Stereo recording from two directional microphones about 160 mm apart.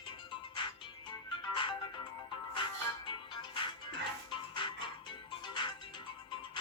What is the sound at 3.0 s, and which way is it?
Music, 30° left (ahead or behind).